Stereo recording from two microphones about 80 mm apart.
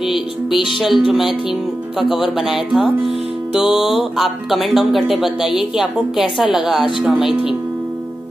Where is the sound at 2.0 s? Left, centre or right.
Left.